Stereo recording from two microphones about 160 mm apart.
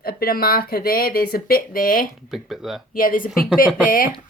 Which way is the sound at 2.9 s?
60° left (ahead or behind).